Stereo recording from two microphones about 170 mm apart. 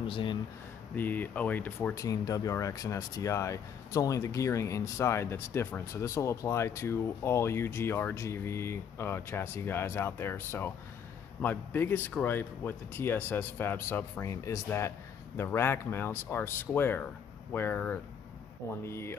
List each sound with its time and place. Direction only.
0.0 s speech: 30° left (ahead or behind)
0.9 s speech: 10° left (ahead or behind)